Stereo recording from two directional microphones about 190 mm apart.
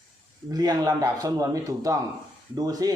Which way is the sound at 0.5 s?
20° right (ahead or behind).